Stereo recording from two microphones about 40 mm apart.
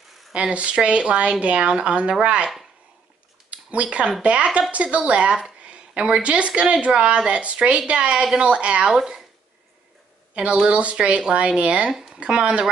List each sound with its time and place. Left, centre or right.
0.3 s a woman's voice: right
3.4 s a sound: right
4.2 s a woman's voice: right
10.3 s a woman's voice: right
11.9 s a sound: centre
12.2 s a woman's voice: right